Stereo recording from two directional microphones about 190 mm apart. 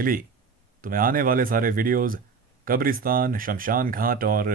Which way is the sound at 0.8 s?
50° right (ahead or behind).